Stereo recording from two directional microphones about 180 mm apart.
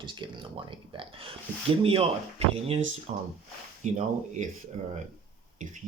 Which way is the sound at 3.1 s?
35° right (ahead or behind).